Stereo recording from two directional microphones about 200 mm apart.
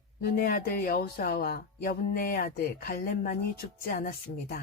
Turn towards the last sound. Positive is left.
turn(degrees=50)  # may be behind; listen again after turning